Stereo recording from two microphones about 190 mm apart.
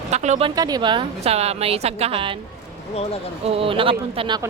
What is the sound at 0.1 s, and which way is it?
Speech, 35° right (ahead or behind).